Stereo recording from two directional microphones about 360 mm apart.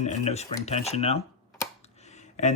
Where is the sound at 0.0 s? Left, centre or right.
Centre.